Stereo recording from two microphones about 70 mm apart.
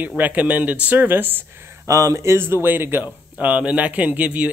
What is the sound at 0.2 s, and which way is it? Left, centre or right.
A man's voice, right.